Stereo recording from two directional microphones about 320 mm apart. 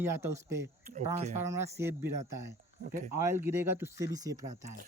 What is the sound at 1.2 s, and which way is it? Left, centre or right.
Speech, right.